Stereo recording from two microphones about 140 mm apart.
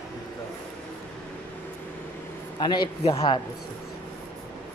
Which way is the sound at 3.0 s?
45° left (ahead or behind).